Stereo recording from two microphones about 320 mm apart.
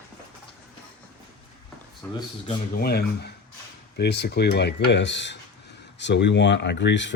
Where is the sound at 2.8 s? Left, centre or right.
Left.